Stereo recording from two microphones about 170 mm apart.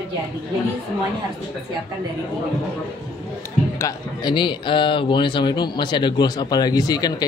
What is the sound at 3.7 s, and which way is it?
Speech, 20° left (ahead or behind).